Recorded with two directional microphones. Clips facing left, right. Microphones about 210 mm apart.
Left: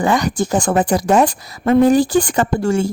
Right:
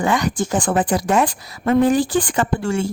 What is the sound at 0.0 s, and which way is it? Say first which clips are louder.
A woman's voice: left 3 dB; 40° left (ahead or behind).